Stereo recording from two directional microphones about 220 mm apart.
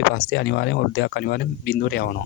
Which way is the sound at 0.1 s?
50° left (ahead or behind).